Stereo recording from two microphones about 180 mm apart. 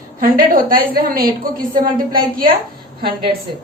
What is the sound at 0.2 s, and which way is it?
A woman's voice, 50° right (ahead or behind).